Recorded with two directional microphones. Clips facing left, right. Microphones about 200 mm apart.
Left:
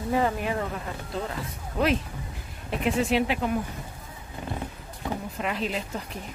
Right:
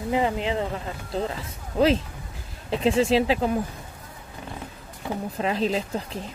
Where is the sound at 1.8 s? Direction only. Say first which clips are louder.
Right 4 dB; 30° right (ahead or behind).